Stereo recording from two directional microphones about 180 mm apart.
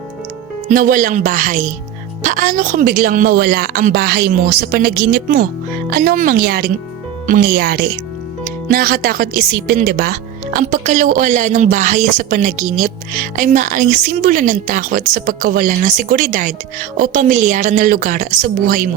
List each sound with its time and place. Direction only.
0.7 s a woman's voice: 50° right (ahead or behind)